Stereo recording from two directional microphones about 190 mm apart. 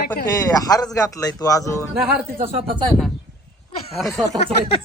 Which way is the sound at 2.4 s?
30° right (ahead or behind).